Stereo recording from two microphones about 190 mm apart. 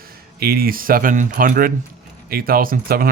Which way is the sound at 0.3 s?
55° right (ahead or behind).